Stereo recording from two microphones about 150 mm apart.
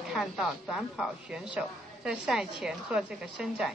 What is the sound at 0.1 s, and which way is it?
Speech, centre (ahead or behind).